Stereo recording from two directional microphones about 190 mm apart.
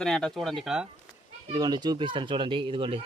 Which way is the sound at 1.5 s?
20° right (ahead or behind).